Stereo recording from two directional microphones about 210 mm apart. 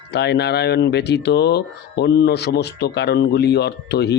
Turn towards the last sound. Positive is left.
turn(degrees=50)  # may be behind; listen again after turning